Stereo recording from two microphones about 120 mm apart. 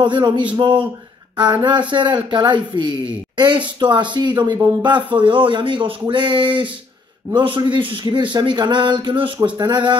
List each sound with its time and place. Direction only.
0.0 s speech: 40° right (ahead or behind)